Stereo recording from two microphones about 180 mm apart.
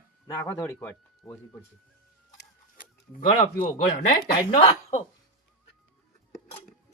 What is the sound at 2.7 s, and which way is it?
Chicken, 50° left (ahead or behind).